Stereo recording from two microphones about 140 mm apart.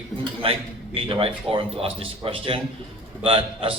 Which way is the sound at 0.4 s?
40° right (ahead or behind).